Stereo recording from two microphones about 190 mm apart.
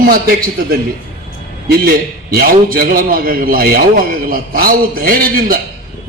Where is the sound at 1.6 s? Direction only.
55° right (ahead or behind).